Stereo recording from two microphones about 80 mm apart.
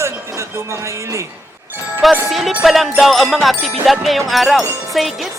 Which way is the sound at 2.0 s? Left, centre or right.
Centre.